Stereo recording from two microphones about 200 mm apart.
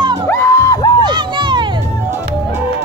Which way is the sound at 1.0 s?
25° right (ahead or behind).